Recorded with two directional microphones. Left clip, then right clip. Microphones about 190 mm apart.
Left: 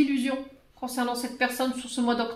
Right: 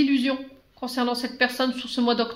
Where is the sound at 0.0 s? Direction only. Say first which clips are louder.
Right 3 dB; 50° right (ahead or behind).